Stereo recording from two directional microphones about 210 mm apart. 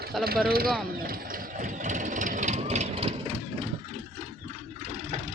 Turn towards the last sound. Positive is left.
turn(degrees=-35)  # may be behind; listen again after turning